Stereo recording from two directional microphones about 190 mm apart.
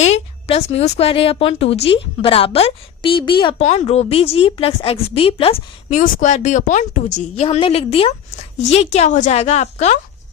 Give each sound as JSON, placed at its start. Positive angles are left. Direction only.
{"t": 0.0, "sound": "a woman's voice", "side_deg": 35}
{"t": 6.0, "sound": "a woman's voice", "side_deg": 40}
{"t": 7.4, "sound": "a woman's voice", "side_deg": 30}